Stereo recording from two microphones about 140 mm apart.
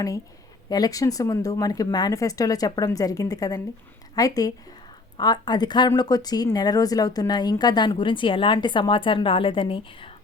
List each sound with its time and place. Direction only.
0.7 s a woman's voice: 25° left (ahead or behind)